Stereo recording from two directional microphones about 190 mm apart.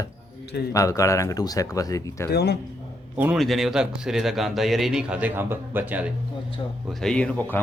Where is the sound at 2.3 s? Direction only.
60° left (ahead or behind).